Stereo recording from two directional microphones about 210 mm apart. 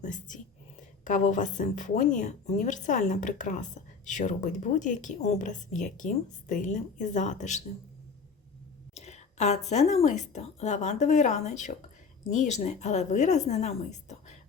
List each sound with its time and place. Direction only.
0.0 s speech: 35° left (ahead or behind)
9.0 s a sound: 30° left (ahead or behind)
9.6 s speech: 30° left (ahead or behind)